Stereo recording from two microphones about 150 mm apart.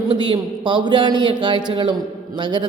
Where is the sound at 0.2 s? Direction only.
30° right (ahead or behind).